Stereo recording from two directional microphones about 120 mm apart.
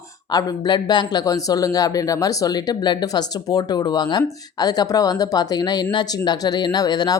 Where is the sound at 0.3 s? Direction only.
35° left (ahead or behind).